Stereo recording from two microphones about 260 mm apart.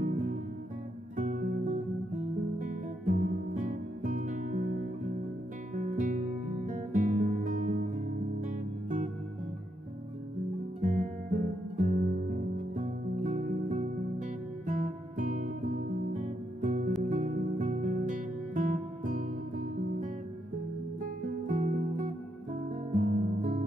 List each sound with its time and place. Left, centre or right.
1.1 s music: right
5.8 s music: right
10.8 s music: right
21.5 s music: right